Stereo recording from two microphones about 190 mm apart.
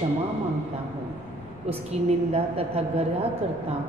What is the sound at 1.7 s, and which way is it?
A woman's voice, 35° right (ahead or behind).